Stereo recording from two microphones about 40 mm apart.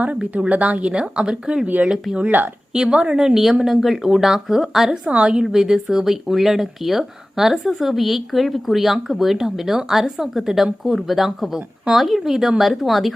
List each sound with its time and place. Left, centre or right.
0.2 s a woman's voice: right
0.9 s a woman's voice: right
1.6 s speech: right
2.7 s a woman's voice: right
3.2 s speech: centre
5.0 s a woman's voice: right
5.4 s speech: centre